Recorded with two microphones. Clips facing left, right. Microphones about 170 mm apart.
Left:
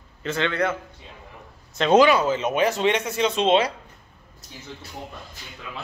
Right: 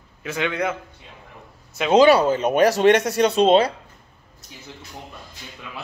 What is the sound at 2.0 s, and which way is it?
Speech, 35° right (ahead or behind).